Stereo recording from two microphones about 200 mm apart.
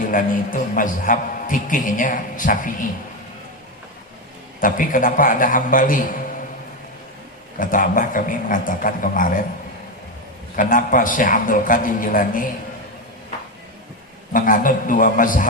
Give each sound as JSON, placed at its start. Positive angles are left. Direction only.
{"t": 0.0, "sound": "a man's voice", "side_deg": 45}
{"t": 4.6, "sound": "a man's voice", "side_deg": 45}
{"t": 7.6, "sound": "a man's voice", "side_deg": 45}
{"t": 10.5, "sound": "a man's voice", "side_deg": 40}
{"t": 14.3, "sound": "a man's voice", "side_deg": 45}